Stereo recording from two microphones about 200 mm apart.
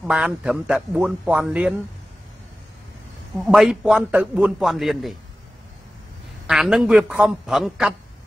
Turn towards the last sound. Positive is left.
turn(degrees=0)  # may be behind; listen again after turning